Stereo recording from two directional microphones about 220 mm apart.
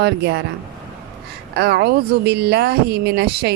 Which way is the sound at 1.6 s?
50° right (ahead or behind).